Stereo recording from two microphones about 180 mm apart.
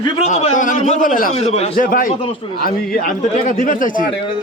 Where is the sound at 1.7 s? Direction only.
50° left (ahead or behind).